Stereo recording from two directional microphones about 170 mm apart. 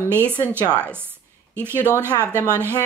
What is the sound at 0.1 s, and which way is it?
Speech, 15° right (ahead or behind).